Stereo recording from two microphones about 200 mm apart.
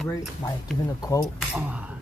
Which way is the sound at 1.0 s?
20° left (ahead or behind).